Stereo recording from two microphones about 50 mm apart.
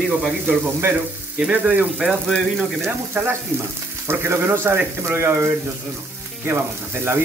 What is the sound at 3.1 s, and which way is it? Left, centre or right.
Speech, right.